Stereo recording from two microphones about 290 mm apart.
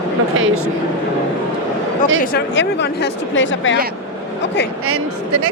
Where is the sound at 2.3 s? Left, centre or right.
Left.